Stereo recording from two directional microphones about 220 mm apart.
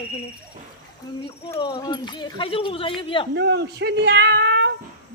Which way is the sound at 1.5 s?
20° left (ahead or behind).